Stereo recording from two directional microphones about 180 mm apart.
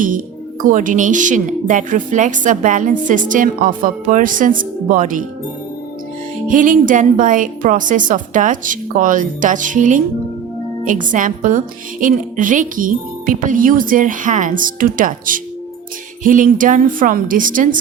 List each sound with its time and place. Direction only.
0.6 s a woman's voice: 45° right (ahead or behind)
6.5 s a woman's voice: 45° right (ahead or behind)